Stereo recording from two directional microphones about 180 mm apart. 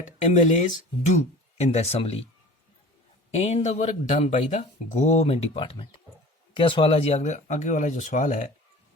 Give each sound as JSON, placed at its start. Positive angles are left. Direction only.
{"t": 0.0, "sound": "speech", "side_deg": 40}
{"t": 3.3, "sound": "speech", "side_deg": 35}